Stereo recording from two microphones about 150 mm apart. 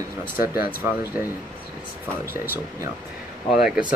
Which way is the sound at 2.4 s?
15° right (ahead or behind).